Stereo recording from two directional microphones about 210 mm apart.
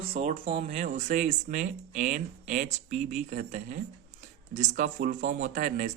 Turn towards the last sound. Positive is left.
turn(degrees=-35)  # may be behind; listen again after turning